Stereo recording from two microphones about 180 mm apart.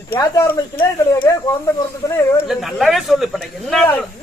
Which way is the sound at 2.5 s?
Centre (ahead or behind).